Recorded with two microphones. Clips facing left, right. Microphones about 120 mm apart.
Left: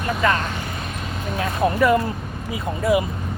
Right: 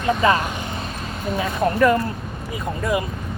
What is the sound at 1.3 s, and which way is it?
Speech, 5° left (ahead or behind).